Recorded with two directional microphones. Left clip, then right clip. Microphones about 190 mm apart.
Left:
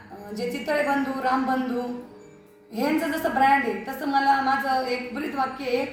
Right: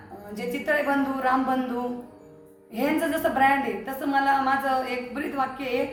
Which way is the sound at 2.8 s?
15° right (ahead or behind).